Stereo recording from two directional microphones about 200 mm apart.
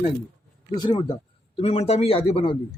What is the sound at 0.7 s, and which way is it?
Speech, 20° left (ahead or behind).